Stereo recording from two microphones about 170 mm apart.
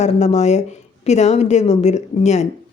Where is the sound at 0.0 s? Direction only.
40° left (ahead or behind).